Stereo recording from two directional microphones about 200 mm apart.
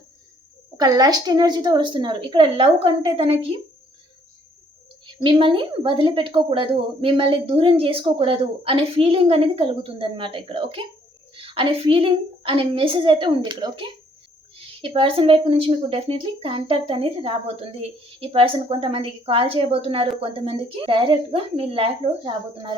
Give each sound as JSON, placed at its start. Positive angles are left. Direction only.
{"t": 0.8, "sound": "speech", "side_deg": -20}
{"t": 5.0, "sound": "speech", "side_deg": -25}